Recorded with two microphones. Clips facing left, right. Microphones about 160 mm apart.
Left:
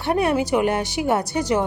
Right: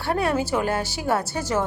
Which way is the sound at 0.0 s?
20° left (ahead or behind).